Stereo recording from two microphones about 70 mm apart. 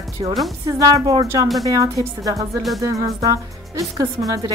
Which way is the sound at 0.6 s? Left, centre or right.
Right.